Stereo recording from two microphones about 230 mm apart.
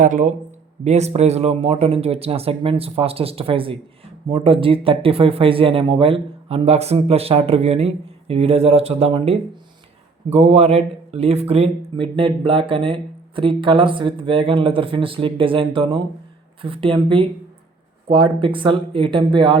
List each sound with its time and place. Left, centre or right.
0.0 s speech: right